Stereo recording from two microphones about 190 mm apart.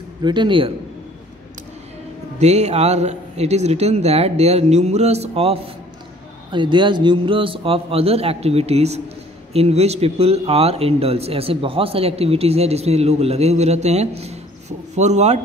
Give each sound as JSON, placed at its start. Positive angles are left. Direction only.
{"t": 0.2, "sound": "a man's voice", "side_deg": -25}
{"t": 2.3, "sound": "speech", "side_deg": -35}